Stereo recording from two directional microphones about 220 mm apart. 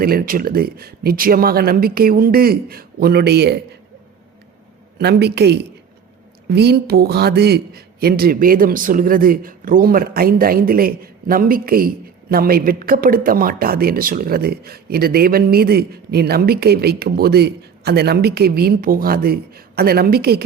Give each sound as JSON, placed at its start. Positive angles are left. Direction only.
{"t": 0.0, "sound": "speech", "side_deg": -45}
{"t": 4.9, "sound": "speech", "side_deg": -50}